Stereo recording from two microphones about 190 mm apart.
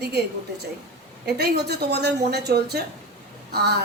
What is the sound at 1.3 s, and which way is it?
A woman's voice, 60° right (ahead or behind).